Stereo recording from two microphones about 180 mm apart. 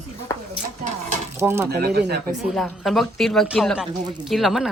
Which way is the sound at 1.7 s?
60° right (ahead or behind).